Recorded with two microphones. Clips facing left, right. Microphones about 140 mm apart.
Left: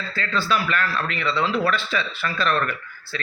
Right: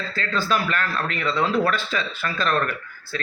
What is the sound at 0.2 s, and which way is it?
A man's voice, 45° right (ahead or behind).